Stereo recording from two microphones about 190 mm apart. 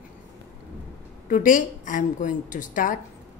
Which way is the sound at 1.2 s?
45° left (ahead or behind).